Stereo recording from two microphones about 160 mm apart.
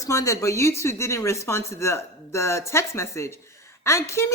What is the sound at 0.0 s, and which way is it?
A woman's voice, 20° left (ahead or behind).